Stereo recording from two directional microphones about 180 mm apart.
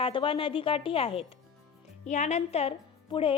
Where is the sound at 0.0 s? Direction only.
30° left (ahead or behind).